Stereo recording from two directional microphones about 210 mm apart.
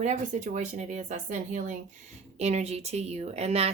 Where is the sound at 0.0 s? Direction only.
35° right (ahead or behind).